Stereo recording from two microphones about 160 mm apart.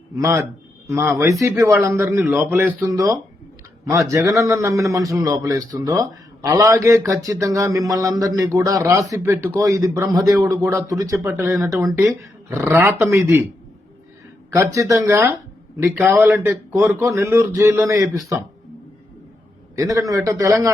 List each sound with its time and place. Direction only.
0.2 s a man's voice: 20° right (ahead or behind)
14.5 s a man's voice: 20° right (ahead or behind)
19.7 s a man's voice: 20° right (ahead or behind)